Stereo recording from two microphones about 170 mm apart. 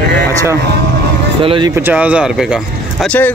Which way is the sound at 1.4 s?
30° right (ahead or behind).